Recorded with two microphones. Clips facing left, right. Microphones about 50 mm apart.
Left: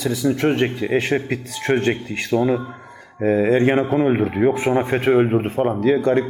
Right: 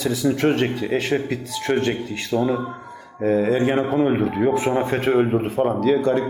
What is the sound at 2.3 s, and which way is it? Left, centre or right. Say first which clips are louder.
Speech: left 2 dB; left.